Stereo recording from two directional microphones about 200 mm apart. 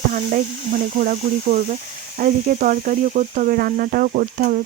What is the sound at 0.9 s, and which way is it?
Speech, 40° right (ahead or behind).